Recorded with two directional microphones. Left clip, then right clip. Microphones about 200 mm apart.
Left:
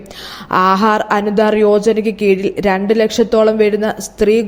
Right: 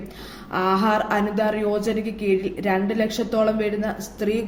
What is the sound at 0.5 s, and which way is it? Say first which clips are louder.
A woman's voice: left 9 dB; 45° left (ahead or behind).